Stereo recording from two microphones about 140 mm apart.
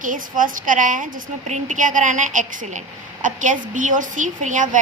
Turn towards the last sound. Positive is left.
turn(degrees=-65)  # may be behind; listen again after turning